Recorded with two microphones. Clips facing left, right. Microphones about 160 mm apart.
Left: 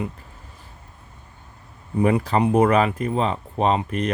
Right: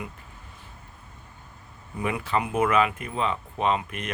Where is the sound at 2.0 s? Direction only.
35° left (ahead or behind).